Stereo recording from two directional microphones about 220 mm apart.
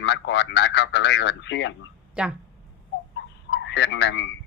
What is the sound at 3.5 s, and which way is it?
Speech, 50° left (ahead or behind).